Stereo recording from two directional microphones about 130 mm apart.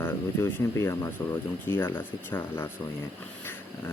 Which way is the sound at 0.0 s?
20° left (ahead or behind).